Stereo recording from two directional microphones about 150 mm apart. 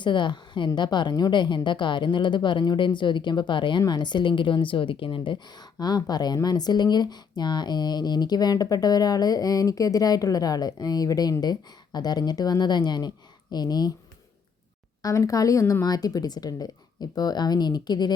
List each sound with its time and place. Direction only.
0.0 s a woman's voice: 30° left (ahead or behind)
15.0 s speech: 20° left (ahead or behind)